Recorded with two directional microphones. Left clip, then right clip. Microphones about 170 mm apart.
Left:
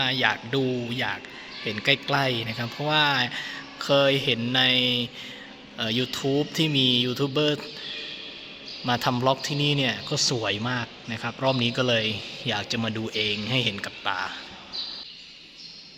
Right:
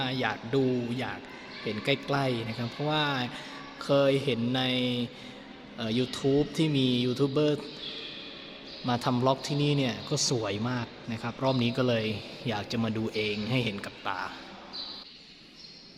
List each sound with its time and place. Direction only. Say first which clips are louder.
0.0 s speech: left 7 dB; centre (ahead or behind)
8.9 s speech: left 4 dB; centre (ahead or behind)